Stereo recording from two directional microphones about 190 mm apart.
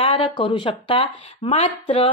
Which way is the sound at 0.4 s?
25° left (ahead or behind).